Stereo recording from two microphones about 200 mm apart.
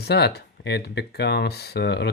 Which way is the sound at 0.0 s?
55° left (ahead or behind).